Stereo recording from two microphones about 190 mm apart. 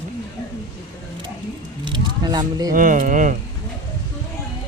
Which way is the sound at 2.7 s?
45° right (ahead or behind).